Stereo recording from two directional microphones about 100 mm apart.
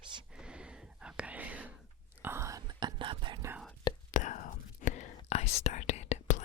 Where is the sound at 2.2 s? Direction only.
25° right (ahead or behind); by 3.4 s 55° right (ahead or behind).